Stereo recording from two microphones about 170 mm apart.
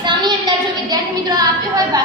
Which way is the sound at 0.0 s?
25° right (ahead or behind).